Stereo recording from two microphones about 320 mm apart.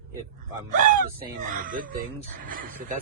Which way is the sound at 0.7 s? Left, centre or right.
Right.